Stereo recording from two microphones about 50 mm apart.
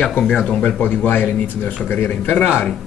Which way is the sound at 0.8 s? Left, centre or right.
Left.